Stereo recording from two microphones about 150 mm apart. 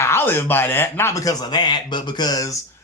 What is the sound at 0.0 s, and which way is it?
Speech, 15° left (ahead or behind).